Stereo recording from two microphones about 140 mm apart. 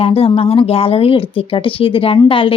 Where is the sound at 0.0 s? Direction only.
40° left (ahead or behind).